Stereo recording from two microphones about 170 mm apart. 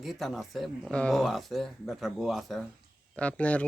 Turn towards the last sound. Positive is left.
turn(degrees=10)  # may be behind; listen again after turning